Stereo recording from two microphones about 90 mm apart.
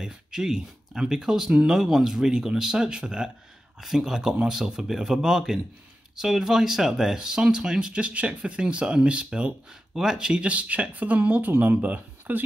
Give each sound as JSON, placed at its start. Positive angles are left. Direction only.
{"t": 0.0, "sound": "speech", "side_deg": -5}